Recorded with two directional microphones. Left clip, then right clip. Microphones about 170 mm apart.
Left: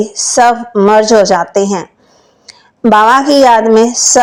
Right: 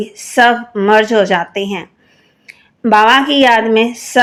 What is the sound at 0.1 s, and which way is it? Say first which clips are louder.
Speech: even; 10° left (ahead or behind).